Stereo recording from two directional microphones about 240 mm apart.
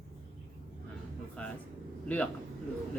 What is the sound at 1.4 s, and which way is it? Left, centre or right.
Speech, centre.